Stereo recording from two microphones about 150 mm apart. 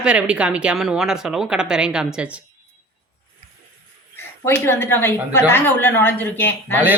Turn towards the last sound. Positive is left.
turn(degrees=15)  # may be behind; listen again after turning